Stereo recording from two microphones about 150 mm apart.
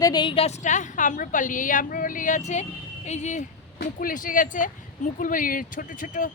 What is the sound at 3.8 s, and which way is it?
Speech, 70° left (ahead or behind).